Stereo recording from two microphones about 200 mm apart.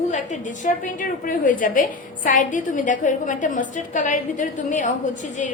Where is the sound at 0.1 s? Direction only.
40° left (ahead or behind).